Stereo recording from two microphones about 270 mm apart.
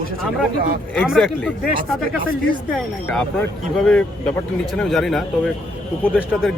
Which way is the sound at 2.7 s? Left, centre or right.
Centre.